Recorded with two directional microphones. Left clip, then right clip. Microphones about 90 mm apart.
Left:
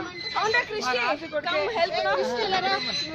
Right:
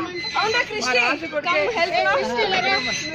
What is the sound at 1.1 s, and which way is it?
Speech, 10° left (ahead or behind).